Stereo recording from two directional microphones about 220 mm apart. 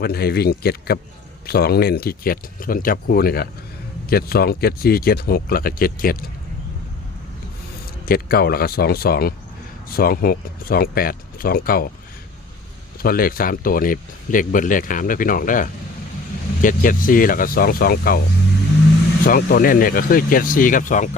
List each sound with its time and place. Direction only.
0.0 s speech: 45° left (ahead or behind)
8.0 s speech: 40° left (ahead or behind)
13.0 s speech: 40° left (ahead or behind)
19.2 s speech: 40° left (ahead or behind)